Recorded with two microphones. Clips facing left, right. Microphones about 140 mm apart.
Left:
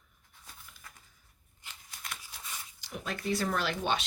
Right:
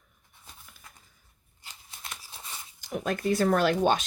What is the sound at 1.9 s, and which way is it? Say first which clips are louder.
Scissors: right 1 dB; 25° right (ahead or behind).